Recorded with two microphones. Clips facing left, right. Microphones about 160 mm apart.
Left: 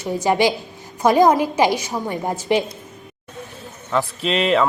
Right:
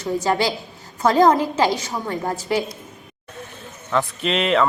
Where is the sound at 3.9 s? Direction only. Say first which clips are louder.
Left 1 dB; centre (ahead or behind).